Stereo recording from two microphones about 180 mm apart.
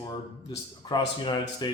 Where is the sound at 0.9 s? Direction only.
25° left (ahead or behind).